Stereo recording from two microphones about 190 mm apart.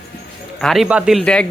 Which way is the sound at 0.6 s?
Centre (ahead or behind).